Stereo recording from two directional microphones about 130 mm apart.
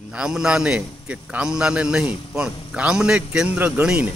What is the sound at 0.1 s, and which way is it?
A man's voice, 5° right (ahead or behind).